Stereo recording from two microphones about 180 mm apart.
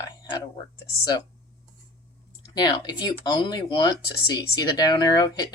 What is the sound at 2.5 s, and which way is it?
Speech, 25° left (ahead or behind).